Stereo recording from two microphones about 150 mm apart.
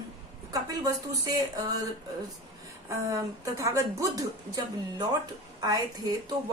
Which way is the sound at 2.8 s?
20° right (ahead or behind).